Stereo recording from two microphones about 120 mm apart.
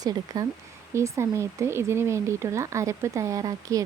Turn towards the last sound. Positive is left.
turn(degrees=-30)  # may be behind; listen again after turning